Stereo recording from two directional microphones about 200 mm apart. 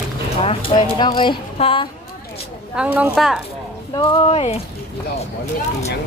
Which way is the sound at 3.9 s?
25° left (ahead or behind).